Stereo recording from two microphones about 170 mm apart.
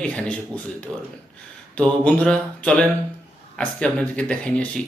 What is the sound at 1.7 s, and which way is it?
Speech, 5° left (ahead or behind).